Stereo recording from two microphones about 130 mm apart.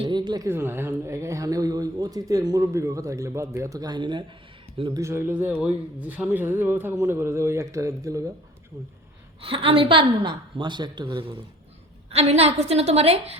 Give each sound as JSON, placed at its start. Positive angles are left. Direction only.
{"t": 0.0, "sound": "a sound", "side_deg": -35}
{"t": 0.4, "sound": "a woman's voice", "side_deg": -20}
{"t": 4.9, "sound": "a man's voice", "side_deg": -25}
{"t": 9.4, "sound": "a woman's voice", "side_deg": -45}
{"t": 12.1, "sound": "a woman's voice", "side_deg": -55}